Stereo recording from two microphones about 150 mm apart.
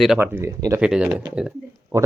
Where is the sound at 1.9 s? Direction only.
20° right (ahead or behind).